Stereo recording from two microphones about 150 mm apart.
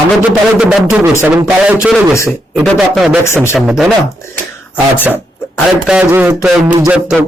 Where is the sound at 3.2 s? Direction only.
15° left (ahead or behind).